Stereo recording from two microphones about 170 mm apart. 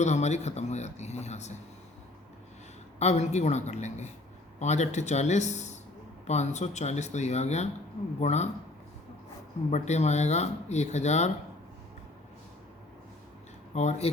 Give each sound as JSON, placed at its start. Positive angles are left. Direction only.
{"t": 0.0, "sound": "speech", "side_deg": 40}
{"t": 3.0, "sound": "speech", "side_deg": 40}
{"t": 9.6, "sound": "speech", "side_deg": 40}
{"t": 13.7, "sound": "speech", "side_deg": 40}